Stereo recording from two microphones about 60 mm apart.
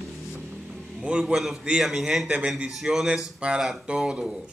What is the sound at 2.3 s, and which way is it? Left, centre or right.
Speech, right.